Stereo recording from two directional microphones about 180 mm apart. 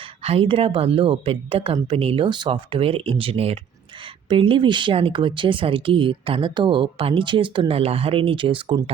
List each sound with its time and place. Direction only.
0.2 s speech: 35° right (ahead or behind)